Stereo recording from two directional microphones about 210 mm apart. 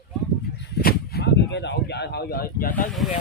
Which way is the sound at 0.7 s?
50° left (ahead or behind).